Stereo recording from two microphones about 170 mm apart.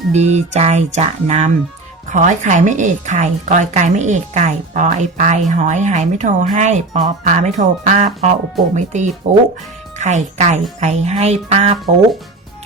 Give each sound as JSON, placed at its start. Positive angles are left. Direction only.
{"t": 0.1, "sound": "speech", "side_deg": -40}